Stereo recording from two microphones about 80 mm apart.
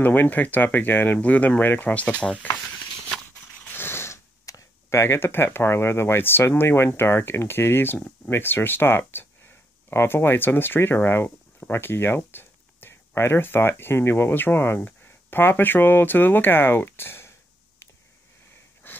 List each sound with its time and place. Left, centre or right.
0.0 s speech: left
3.7 s a sound: left
4.8 s speech: left
18.8 s wheeze: left